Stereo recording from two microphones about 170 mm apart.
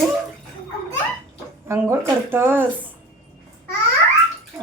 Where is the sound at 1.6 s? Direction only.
15° right (ahead or behind).